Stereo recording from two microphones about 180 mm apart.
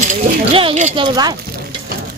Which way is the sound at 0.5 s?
30° right (ahead or behind).